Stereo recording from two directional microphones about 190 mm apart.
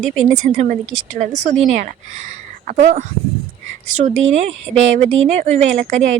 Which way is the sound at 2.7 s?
40° right (ahead or behind).